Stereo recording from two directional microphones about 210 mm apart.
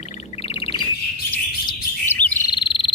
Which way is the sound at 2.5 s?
20° left (ahead or behind).